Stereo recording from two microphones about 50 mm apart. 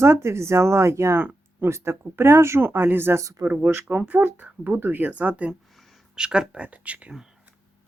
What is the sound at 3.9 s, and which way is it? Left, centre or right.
Speech, right.